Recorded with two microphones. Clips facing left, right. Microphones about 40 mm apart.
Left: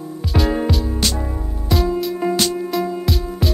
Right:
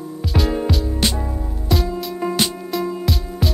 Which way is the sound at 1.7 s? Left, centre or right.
Centre.